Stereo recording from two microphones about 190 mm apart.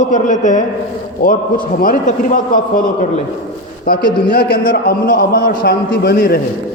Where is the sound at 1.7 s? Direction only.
45° left (ahead or behind).